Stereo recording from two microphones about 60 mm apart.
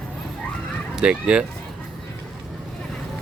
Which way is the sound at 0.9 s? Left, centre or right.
Centre.